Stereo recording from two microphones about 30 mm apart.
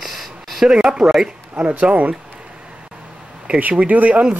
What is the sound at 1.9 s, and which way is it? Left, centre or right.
Speech, right.